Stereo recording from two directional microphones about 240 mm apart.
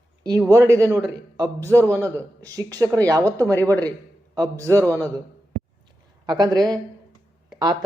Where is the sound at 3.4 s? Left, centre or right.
Centre.